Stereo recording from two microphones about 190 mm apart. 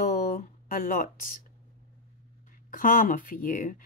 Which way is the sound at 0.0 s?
45° left (ahead or behind).